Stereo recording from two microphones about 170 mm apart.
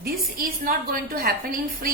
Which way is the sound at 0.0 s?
55° right (ahead or behind).